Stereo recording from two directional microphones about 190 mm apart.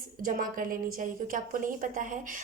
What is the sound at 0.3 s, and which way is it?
A woman's voice, 45° right (ahead or behind).